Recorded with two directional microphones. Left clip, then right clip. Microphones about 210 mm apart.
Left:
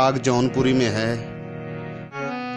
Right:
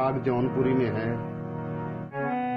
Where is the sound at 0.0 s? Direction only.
50° left (ahead or behind).